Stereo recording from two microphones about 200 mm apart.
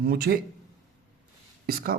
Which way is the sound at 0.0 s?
50° right (ahead or behind).